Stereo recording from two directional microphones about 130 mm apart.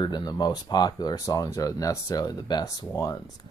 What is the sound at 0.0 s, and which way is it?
Speech, 30° left (ahead or behind).